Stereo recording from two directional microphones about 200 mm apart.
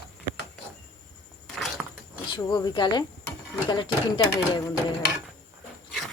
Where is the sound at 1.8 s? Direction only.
5° right (ahead or behind).